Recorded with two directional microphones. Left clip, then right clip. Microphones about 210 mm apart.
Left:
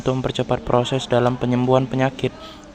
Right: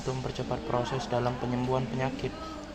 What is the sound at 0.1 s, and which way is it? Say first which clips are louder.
Speech: left 12 dB; 50° left (ahead or behind).